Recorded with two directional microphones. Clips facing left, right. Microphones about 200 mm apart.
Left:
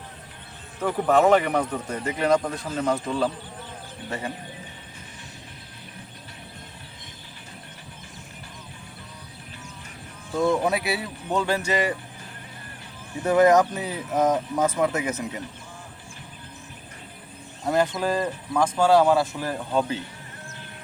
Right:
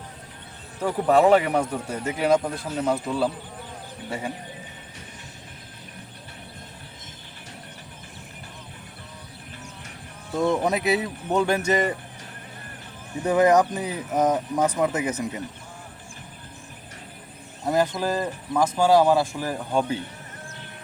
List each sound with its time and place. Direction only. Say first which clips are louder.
0.8 s speech: right 1 dB; 15° right (ahead or behind)
10.3 s speech: even; 20° right (ahead or behind)
13.2 s speech: left 1 dB; 15° right (ahead or behind)
17.7 s speech: even; 5° right (ahead or behind)